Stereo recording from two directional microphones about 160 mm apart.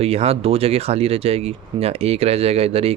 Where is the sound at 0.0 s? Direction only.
40° right (ahead or behind).